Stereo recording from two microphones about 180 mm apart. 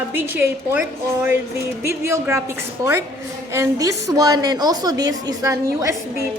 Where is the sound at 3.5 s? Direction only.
15° right (ahead or behind).